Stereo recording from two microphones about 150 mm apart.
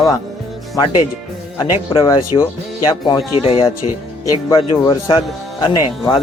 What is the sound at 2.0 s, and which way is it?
Speech, 30° left (ahead or behind).